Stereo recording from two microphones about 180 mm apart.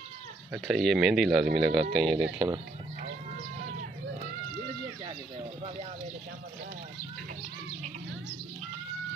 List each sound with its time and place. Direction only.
0.5 s speech: centre (ahead or behind)
2.3 s speech: 15° right (ahead or behind)